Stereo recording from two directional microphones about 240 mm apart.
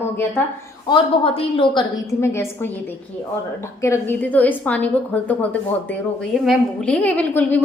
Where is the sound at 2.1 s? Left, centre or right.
Centre.